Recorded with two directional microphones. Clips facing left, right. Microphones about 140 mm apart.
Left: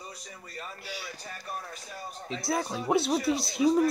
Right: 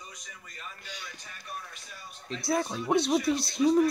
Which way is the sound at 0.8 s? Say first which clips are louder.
Left 5 dB; 5° left (ahead or behind).